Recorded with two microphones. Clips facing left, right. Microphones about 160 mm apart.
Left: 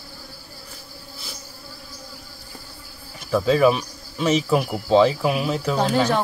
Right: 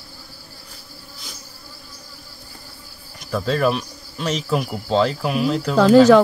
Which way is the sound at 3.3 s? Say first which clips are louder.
Left 3 dB; 5° left (ahead or behind).